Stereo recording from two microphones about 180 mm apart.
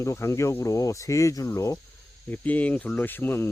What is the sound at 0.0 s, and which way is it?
Speech, 15° left (ahead or behind).